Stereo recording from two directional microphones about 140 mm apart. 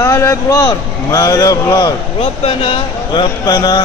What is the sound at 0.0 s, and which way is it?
A man's voice, 20° left (ahead or behind).